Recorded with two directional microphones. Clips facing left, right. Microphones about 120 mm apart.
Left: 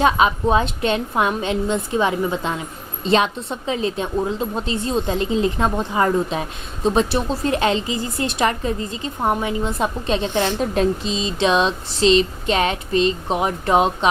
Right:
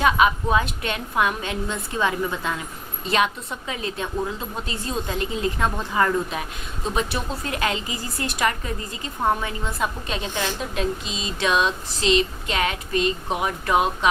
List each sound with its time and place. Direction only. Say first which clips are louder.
0.0 s a woman's voice: left 3 dB; 25° left (ahead or behind)